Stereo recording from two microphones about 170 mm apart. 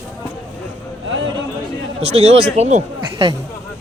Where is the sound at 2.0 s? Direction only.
40° right (ahead or behind).